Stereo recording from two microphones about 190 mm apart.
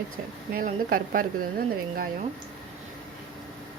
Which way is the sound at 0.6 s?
50° right (ahead or behind).